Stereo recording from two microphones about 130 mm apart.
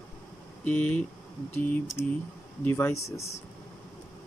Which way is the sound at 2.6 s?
15° left (ahead or behind).